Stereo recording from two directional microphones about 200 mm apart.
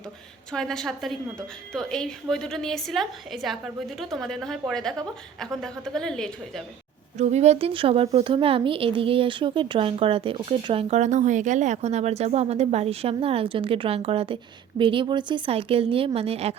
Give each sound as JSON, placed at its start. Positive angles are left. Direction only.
{"t": 0.5, "sound": "a woman's voice", "side_deg": 5}
{"t": 7.2, "sound": "a woman's voice", "side_deg": -35}